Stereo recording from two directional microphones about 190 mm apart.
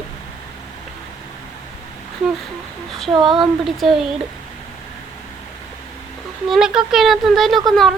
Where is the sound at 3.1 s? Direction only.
25° right (ahead or behind).